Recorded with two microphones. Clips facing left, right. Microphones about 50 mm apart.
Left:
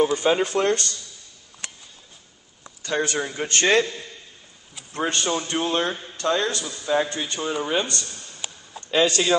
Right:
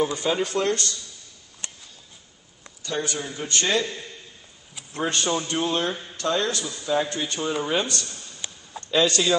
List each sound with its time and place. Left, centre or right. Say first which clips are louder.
0.0 s speech: left 4 dB; left
2.8 s a man's voice: left 4 dB; left
4.9 s a man's voice: left 1 dB; centre
8.9 s speech: left 1 dB; centre